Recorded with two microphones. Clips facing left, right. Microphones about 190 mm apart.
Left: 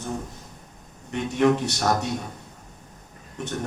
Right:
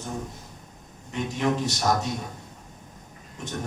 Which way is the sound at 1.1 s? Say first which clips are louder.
Left 6 dB; 60° left (ahead or behind).